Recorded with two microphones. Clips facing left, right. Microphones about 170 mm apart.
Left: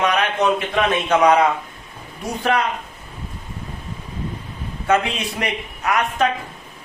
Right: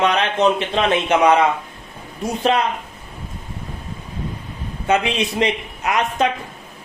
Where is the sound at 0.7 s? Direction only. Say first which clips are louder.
Right 1 dB; 25° right (ahead or behind).